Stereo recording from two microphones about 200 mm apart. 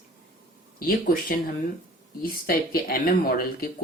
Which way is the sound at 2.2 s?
50° left (ahead or behind).